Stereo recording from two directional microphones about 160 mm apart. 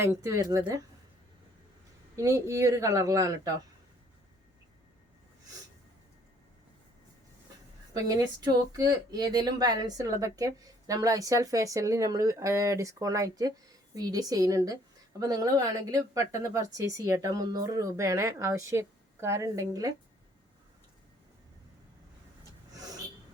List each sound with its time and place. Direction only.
0.0 s speech: 20° right (ahead or behind)
2.1 s speech: 20° right (ahead or behind)
7.9 s speech: 25° right (ahead or behind)